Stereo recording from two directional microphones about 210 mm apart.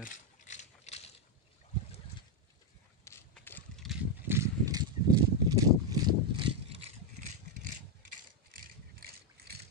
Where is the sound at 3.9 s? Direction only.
10° right (ahead or behind); by 7.3 s 30° right (ahead or behind).